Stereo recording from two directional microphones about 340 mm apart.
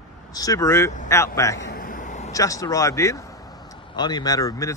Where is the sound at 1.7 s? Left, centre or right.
Left.